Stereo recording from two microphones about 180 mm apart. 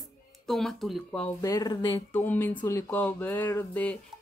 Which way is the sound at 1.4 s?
20° left (ahead or behind).